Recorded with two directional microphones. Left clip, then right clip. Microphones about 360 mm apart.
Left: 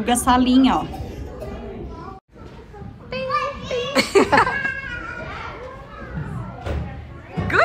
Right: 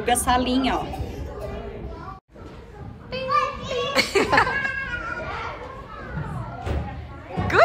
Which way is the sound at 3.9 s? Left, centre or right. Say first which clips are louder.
Left 4 dB; centre.